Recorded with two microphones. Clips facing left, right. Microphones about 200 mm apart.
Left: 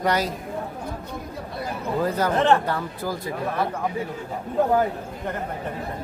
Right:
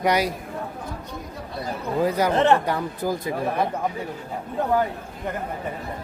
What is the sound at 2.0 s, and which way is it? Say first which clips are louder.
Speech: right 2 dB; 10° right (ahead or behind).